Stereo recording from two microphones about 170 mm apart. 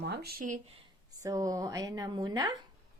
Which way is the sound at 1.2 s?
20° right (ahead or behind).